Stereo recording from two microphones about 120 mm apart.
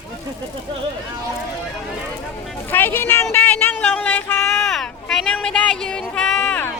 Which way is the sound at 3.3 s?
15° left (ahead or behind).